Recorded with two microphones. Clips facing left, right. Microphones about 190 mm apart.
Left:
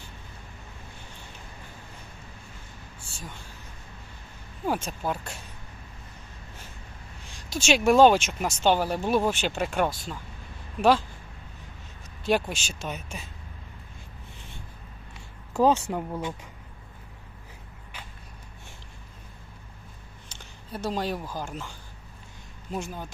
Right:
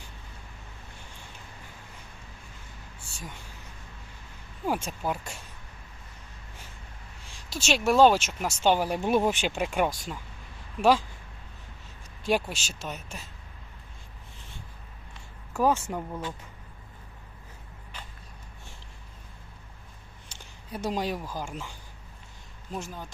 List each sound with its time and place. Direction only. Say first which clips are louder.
4.6 s speech: left 1 dB; 10° right (ahead or behind)
7.5 s speech: left 3 dB; centre (ahead or behind)
12.2 s speech: left 2 dB; 5° right (ahead or behind)
15.5 s speech: left 3 dB; 20° left (ahead or behind)
20.3 s speech: even; 15° right (ahead or behind)
22.7 s speech: left 3 dB; 5° left (ahead or behind)